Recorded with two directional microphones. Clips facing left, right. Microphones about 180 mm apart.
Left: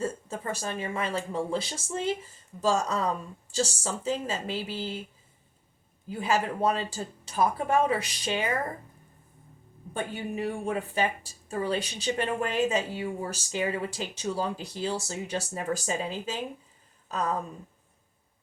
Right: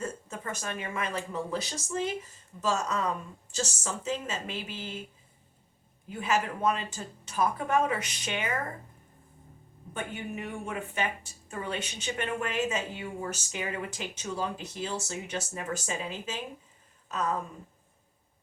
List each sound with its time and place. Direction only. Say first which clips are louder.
0.0 s a woman's voice: left 4 dB; 30° left (ahead or behind)
6.1 s a woman's voice: left 2 dB; 35° left (ahead or behind)
9.9 s a woman's voice: left 4 dB; 35° left (ahead or behind)